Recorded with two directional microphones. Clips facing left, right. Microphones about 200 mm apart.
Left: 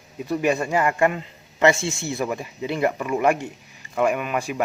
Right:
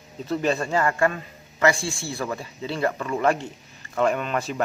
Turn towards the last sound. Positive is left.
turn(degrees=10)  # may be behind; listen again after turning